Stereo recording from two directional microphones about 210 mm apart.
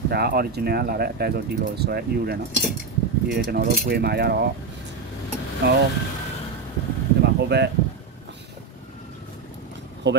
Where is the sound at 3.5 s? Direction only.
50° right (ahead or behind).